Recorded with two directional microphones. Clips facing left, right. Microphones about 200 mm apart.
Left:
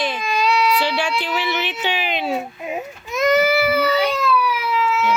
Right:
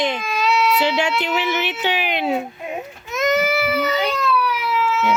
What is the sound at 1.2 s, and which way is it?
A child's voice, 15° right (ahead or behind).